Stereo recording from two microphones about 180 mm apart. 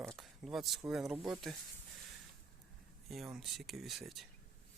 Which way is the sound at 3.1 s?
Centre (ahead or behind).